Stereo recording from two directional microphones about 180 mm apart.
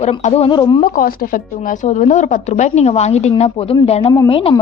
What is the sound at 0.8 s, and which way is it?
Speech, 50° left (ahead or behind).